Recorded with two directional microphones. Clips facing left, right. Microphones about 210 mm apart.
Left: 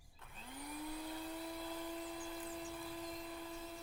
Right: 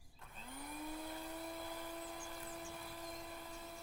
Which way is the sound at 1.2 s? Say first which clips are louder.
Left 2 dB; 15° right (ahead or behind).